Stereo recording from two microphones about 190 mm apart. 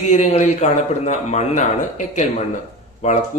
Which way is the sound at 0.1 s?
40° left (ahead or behind).